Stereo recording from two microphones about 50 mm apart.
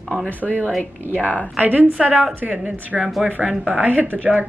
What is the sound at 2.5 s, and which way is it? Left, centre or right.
Speech, right.